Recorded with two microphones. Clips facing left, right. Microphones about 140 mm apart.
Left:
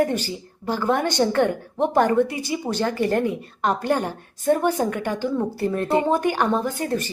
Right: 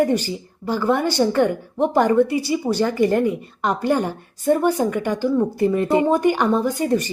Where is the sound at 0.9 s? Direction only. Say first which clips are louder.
Right 2 dB; 10° right (ahead or behind).